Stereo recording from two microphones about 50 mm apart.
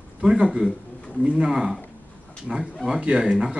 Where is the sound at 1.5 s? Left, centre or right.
Centre.